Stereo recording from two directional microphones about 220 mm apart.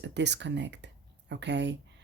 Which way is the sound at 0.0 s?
50° right (ahead or behind).